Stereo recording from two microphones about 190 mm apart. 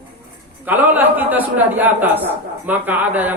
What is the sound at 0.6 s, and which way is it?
A man's voice, 10° right (ahead or behind).